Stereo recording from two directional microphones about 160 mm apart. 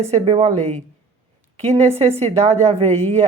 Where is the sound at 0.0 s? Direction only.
40° right (ahead or behind).